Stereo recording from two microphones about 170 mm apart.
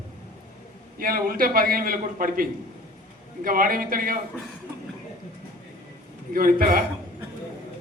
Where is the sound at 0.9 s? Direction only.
60° right (ahead or behind).